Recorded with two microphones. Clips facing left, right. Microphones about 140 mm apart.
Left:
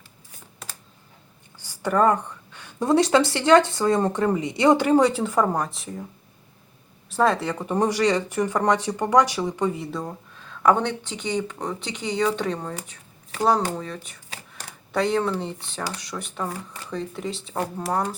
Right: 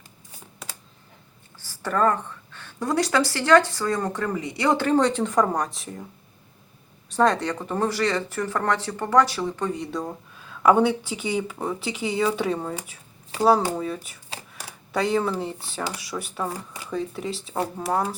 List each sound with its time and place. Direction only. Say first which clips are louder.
1.5 s a woman's voice: left 3 dB; 15° left (ahead or behind)
7.1 s speech: even; 5° left (ahead or behind)
14.5 s a sound: left 2 dB; centre (ahead or behind)
16.0 s speech: right 1 dB; 5° right (ahead or behind)